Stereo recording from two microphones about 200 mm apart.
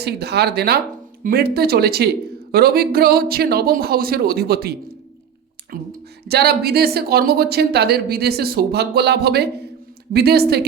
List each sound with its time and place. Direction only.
0.0 s speech: 55° right (ahead or behind)